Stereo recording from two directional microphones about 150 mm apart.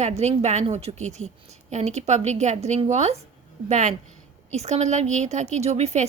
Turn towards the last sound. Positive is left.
turn(degrees=-45)  # may be behind; listen again after turning